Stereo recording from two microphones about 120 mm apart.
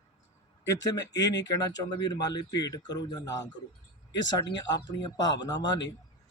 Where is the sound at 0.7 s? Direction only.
30° left (ahead or behind).